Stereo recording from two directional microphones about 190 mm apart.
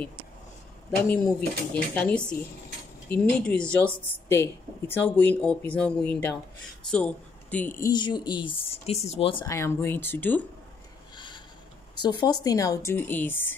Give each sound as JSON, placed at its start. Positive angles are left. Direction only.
{"t": 1.1, "sound": "speech", "side_deg": 5}
{"t": 3.3, "sound": "speech", "side_deg": 5}
{"t": 7.9, "sound": "speech", "side_deg": 25}
{"t": 9.5, "sound": "speech", "side_deg": 15}
{"t": 11.1, "sound": "a sound", "side_deg": 25}
{"t": 12.0, "sound": "speech", "side_deg": 25}